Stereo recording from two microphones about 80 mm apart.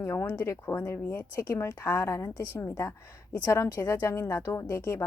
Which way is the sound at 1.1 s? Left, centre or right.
Left.